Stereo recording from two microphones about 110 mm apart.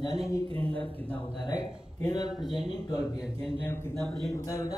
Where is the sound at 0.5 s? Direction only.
10° left (ahead or behind).